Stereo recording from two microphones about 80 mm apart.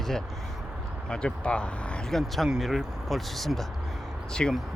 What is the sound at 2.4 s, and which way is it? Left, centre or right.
Speech, centre.